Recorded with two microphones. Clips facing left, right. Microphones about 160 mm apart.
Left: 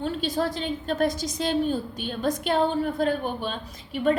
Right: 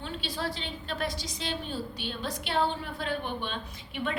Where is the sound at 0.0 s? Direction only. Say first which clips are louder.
Left 8 dB; 45° left (ahead or behind).